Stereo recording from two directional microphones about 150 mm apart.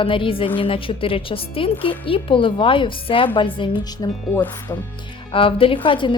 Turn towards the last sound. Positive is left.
turn(degrees=35)  # may be behind; listen again after turning